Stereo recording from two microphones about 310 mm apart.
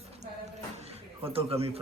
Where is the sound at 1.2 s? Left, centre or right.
Centre.